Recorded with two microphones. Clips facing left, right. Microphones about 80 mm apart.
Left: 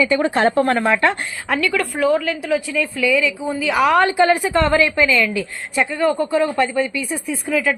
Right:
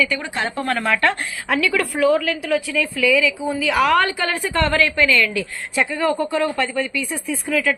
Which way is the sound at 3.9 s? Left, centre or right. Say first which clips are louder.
Left 4 dB; centre.